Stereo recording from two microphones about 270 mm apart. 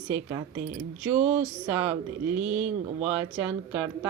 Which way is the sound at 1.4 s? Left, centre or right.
Centre.